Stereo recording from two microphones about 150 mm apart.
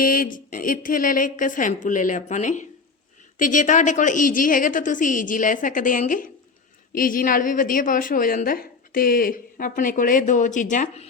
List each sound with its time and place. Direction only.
0.0 s a woman's voice: 70° left (ahead or behind)